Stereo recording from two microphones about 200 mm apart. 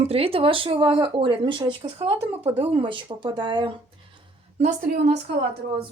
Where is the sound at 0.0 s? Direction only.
30° right (ahead or behind).